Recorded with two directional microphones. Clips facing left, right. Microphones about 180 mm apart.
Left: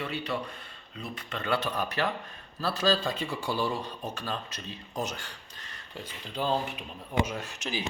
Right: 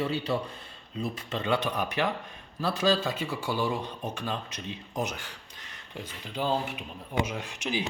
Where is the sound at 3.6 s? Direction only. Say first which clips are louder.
Right 1 dB; 15° right (ahead or behind).